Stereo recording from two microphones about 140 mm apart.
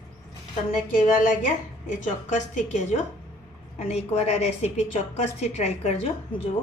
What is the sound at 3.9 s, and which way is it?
A woman's voice, 50° left (ahead or behind).